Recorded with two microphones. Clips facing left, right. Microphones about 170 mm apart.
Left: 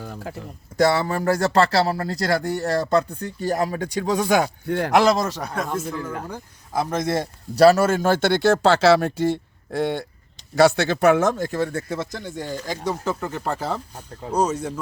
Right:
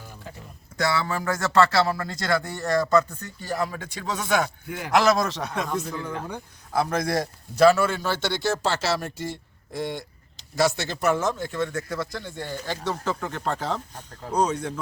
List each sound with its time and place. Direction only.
0.0 s a sound: 70° left (ahead or behind)
0.8 s speech: 40° left (ahead or behind)
5.1 s a man's voice: 5° left (ahead or behind)
7.1 s speech: 30° left (ahead or behind); by 14.7 s 5° left (ahead or behind)